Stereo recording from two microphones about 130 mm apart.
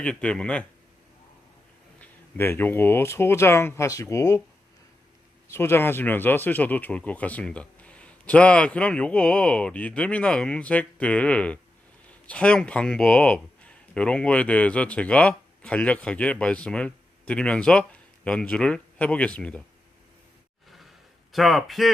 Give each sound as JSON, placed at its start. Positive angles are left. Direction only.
{"t": 0.0, "sound": "speech", "side_deg": 10}
{"t": 2.0, "sound": "speech", "side_deg": 15}
{"t": 5.5, "sound": "speech", "side_deg": 20}
{"t": 21.3, "sound": "speech", "side_deg": 0}